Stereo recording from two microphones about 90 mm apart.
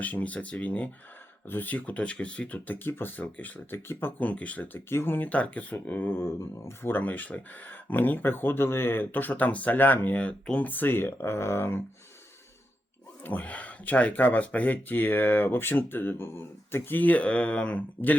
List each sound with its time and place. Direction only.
0.0 s speech: 15° left (ahead or behind)
13.2 s speech: 20° left (ahead or behind)